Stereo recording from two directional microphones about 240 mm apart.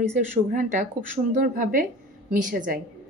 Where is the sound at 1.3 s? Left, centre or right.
Right.